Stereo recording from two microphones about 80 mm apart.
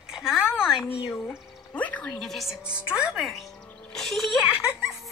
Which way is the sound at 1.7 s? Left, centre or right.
Centre.